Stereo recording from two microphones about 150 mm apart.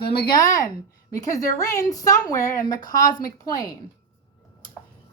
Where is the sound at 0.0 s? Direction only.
90° left.